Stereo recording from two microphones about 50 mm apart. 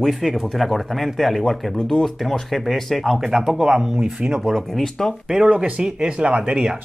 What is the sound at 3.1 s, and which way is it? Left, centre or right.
Speech, centre.